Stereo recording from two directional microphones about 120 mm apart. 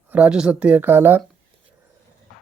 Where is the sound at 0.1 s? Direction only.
10° right (ahead or behind).